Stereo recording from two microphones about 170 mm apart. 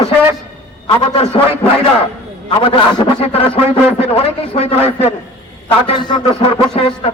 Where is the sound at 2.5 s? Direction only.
30° left (ahead or behind).